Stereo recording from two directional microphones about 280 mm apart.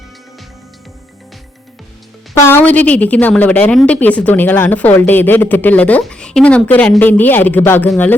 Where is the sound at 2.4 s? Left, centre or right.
Centre.